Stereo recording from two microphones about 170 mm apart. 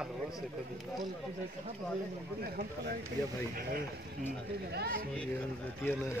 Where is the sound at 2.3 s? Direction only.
70° right (ahead or behind).